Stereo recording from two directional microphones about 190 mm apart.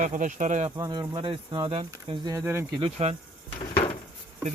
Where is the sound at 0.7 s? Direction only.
20° right (ahead or behind).